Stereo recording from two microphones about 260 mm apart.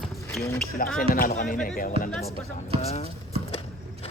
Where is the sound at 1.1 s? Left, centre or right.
Left.